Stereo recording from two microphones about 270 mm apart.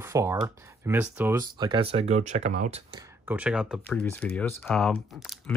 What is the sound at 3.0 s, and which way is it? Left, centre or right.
Speech, centre.